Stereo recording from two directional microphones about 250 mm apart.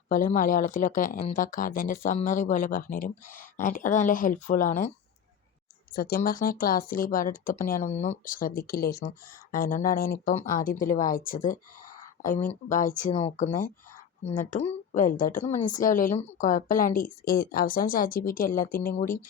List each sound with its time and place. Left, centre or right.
0.1 s speech: left
5.9 s speech: left
12.6 s speech: left